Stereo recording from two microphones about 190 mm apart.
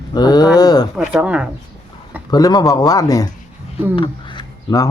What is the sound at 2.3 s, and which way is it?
Speech, 20° left (ahead or behind).